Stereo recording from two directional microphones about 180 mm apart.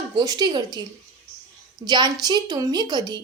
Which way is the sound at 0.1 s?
25° right (ahead or behind).